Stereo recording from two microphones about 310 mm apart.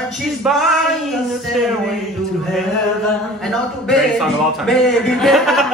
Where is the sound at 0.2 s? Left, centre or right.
Centre.